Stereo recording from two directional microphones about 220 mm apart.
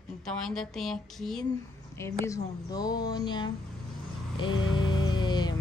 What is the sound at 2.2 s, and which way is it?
Speech, 15° left (ahead or behind).